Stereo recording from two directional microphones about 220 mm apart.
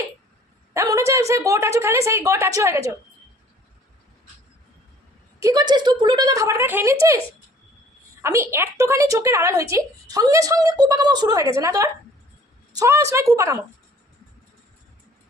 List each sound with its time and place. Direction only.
0.7 s a woman's voice: 15° right (ahead or behind)
5.4 s a woman's voice: 15° right (ahead or behind)
8.2 s a woman's voice: 10° right (ahead or behind)